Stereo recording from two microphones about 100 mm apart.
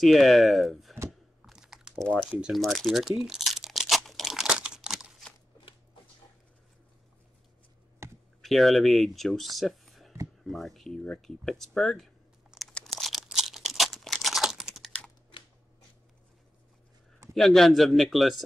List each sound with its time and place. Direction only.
0.0 s speech: centre (ahead or behind)
1.4 s a sound: 5° right (ahead or behind)
2.5 s crumpling: centre (ahead or behind)
8.0 s clicking: 25° right (ahead or behind)
8.4 s speech: centre (ahead or behind)
12.7 s crumpling: centre (ahead or behind)
15.3 s a sound: 60° left (ahead or behind)
17.3 s speech: centre (ahead or behind)